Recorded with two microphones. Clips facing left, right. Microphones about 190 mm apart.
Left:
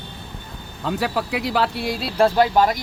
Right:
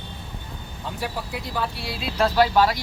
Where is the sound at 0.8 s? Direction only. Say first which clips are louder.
Left 8 dB; 90° left.